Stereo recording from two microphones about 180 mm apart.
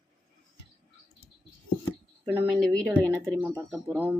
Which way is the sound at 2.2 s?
10° right (ahead or behind).